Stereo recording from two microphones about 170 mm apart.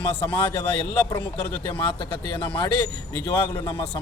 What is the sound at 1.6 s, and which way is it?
Speech, 30° left (ahead or behind).